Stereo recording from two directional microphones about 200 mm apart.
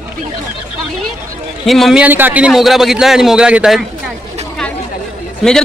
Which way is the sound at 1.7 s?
Centre (ahead or behind).